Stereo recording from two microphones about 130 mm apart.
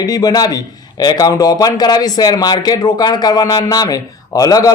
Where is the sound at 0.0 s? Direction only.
30° left (ahead or behind).